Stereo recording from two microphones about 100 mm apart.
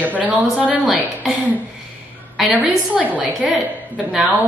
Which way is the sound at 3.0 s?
15° right (ahead or behind).